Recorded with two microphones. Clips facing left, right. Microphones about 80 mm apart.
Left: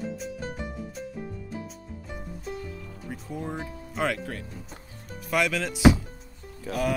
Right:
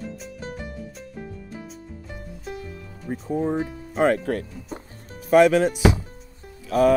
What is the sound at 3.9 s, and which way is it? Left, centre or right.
Speech, right.